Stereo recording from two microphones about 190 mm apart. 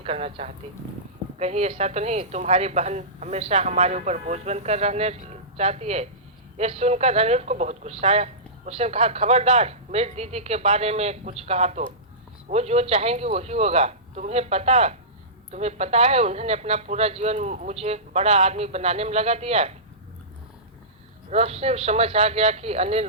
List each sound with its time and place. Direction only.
0.0 s speech: 30° right (ahead or behind)
21.2 s speech: 35° right (ahead or behind)